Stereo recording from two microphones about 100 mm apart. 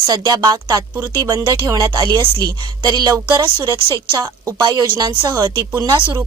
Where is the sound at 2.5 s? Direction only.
45° right (ahead or behind).